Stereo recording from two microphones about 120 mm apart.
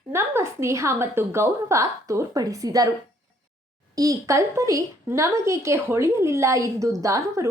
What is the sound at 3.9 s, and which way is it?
A woman's voice, 30° right (ahead or behind).